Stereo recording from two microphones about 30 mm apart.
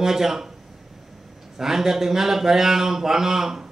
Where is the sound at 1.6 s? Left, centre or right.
Centre.